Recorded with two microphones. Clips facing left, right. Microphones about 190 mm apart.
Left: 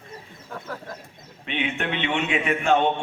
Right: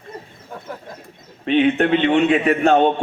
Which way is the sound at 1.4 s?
40° right (ahead or behind).